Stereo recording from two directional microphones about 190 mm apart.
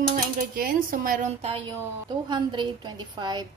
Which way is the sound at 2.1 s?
25° right (ahead or behind).